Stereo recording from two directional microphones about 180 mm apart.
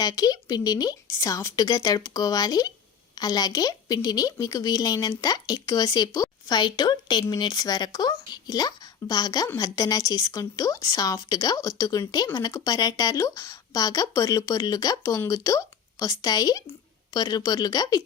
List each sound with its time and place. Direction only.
0.0 s a woman's voice: 20° left (ahead or behind)